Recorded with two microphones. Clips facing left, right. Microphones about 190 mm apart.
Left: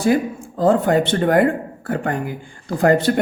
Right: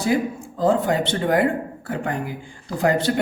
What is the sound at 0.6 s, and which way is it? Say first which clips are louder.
Speech: left 4 dB; 55° left (ahead or behind).